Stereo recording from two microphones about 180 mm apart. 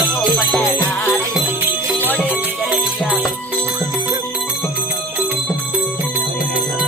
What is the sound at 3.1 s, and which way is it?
Music, 5° left (ahead or behind).